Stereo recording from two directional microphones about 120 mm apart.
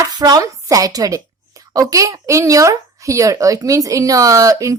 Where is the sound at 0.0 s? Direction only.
30° right (ahead or behind).